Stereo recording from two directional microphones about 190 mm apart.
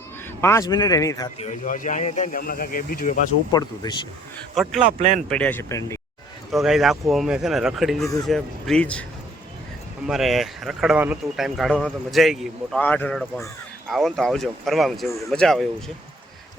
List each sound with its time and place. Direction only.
0.4 s speech: 15° left (ahead or behind)
1.6 s speech: 45° left (ahead or behind)
2.4 s speech: 50° left (ahead or behind)
3.5 s speech: 20° left (ahead or behind)
4.5 s speech: centre (ahead or behind)
4.8 s speech: 40° right (ahead or behind)
5.3 s speech: 5° left (ahead or behind)
6.5 s speech: centre (ahead or behind)
10.1 s speech: centre (ahead or behind)